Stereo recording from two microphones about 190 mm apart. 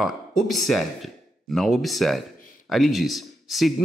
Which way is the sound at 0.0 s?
Centre (ahead or behind).